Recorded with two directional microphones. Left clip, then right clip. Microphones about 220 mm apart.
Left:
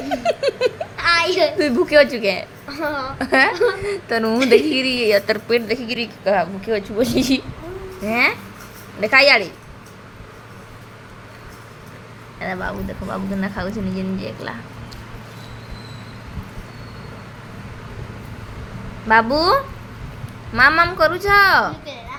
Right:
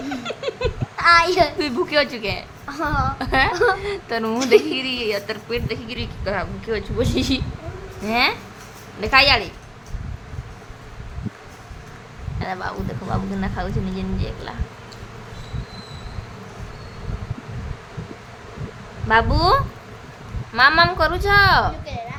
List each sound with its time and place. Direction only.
0.3 s a sound: 10° left (ahead or behind)
0.9 s a child's voice: 15° right (ahead or behind)
1.5 s a woman's voice: 10° left (ahead or behind)
2.7 s a child's voice: 15° right (ahead or behind)
3.2 s a woman's voice: 15° left (ahead or behind)
3.5 s a child's voice: 15° right (ahead or behind)
3.8 s a woman's voice: 10° left (ahead or behind)
12.4 s speech: centre (ahead or behind)
19.0 s a woman's voice: 10° left (ahead or behind)